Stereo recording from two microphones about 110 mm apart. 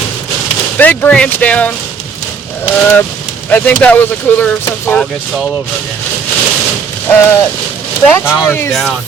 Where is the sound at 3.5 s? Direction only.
15° left (ahead or behind).